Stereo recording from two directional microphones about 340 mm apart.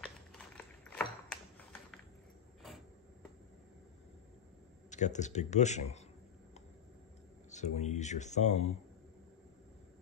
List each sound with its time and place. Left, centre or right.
0.8 s a sound: centre
4.9 s speech: left
7.5 s speech: centre